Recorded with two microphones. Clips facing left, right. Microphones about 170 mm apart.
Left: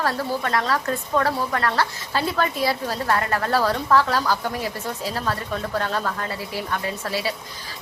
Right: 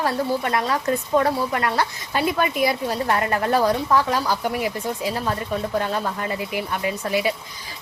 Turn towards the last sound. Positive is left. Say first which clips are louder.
# right 4 dB
turn(degrees=-20)  # may be behind; listen again after turning